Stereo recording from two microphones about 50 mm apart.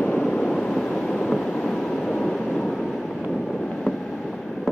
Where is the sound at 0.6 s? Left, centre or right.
Centre.